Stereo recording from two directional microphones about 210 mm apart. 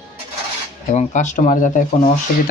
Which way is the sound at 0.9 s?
35° left (ahead or behind).